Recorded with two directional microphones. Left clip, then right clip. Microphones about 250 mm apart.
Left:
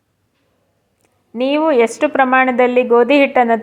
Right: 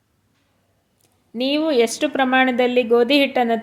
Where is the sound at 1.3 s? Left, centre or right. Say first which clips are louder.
Left 5 dB; centre.